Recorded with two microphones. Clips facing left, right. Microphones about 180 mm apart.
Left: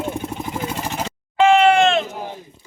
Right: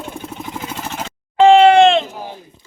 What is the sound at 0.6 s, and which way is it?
Vehicle, 10° left (ahead or behind).